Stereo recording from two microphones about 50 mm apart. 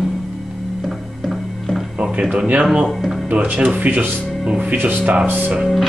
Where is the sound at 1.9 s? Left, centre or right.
Right.